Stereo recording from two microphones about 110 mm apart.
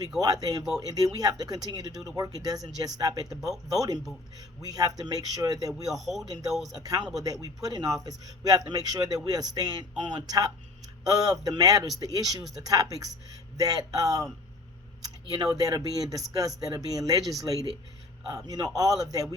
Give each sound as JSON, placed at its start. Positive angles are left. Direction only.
{"t": 0.2, "sound": "a man's voice", "side_deg": -35}
{"t": 5.9, "sound": "speech", "side_deg": 0}
{"t": 6.2, "sound": "a man's voice", "side_deg": -35}
{"t": 6.5, "sound": "speech", "side_deg": 0}
{"t": 6.7, "sound": "a man's voice", "side_deg": -35}
{"t": 15.3, "sound": "a man's voice", "side_deg": -35}